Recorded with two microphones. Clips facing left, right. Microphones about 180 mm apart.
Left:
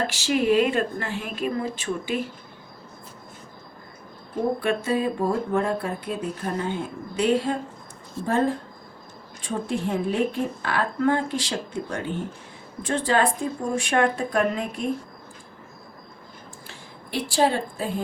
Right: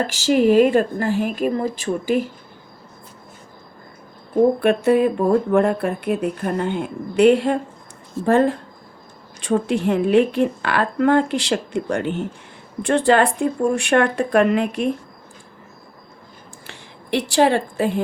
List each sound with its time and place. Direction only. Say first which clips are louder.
0.1 s speech: right 9 dB; 45° right (ahead or behind)
4.6 s a woman's voice: right 8 dB; 60° right (ahead or behind)
16.6 s a woman's voice: right 9 dB; 75° right (ahead or behind)